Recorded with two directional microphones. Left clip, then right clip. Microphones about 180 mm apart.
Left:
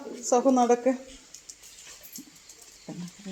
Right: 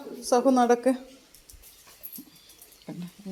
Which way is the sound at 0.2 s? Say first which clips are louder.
Right 1 dB; 5° left (ahead or behind).